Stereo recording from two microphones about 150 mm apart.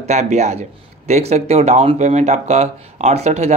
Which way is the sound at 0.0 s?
50° right (ahead or behind).